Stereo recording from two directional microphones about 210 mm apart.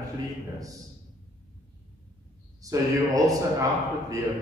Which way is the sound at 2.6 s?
15° right (ahead or behind).